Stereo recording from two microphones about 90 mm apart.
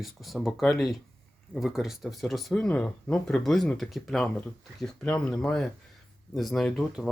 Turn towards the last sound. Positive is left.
turn(degrees=0)  # may be behind; listen again after turning